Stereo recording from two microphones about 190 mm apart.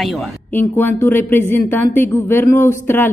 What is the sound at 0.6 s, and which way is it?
A woman's voice, 10° left (ahead or behind).